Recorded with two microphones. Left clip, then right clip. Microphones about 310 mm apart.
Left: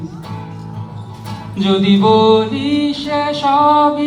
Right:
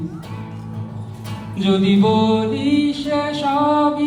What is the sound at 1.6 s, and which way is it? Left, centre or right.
Mantra, left.